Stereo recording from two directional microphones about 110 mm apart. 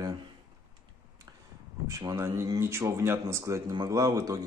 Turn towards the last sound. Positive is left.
turn(degrees=-35)  # may be behind; listen again after turning